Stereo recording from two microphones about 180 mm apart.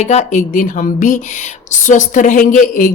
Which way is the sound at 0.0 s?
40° left (ahead or behind).